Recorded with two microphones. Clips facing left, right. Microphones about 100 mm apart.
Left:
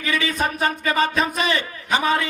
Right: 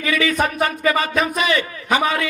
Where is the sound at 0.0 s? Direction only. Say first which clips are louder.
Right 3 dB; 30° left (ahead or behind).